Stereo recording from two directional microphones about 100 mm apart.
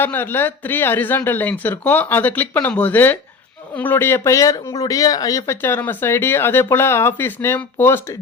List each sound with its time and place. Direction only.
0.0 s speech: 20° left (ahead or behind); by 5.5 s 35° left (ahead or behind)
5.6 s speech: 20° left (ahead or behind)